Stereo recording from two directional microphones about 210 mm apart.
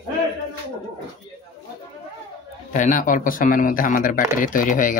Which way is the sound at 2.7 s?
40° left (ahead or behind).